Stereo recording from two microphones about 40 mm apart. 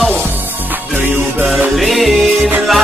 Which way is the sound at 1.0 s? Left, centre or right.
Right.